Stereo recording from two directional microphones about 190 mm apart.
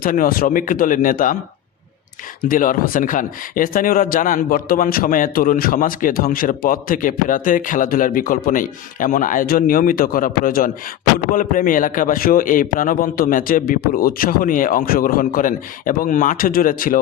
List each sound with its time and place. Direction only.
0.0 s speech: 45° left (ahead or behind)
2.5 s speech: 45° left (ahead or behind)